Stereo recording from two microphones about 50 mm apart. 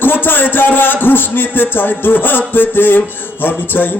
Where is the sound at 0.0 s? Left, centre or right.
Left.